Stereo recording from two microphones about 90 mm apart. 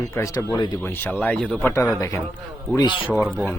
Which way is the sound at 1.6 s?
25° left (ahead or behind).